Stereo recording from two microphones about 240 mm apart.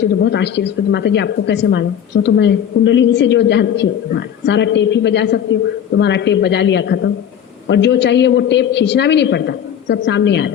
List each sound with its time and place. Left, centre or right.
0.0 s a woman's voice: left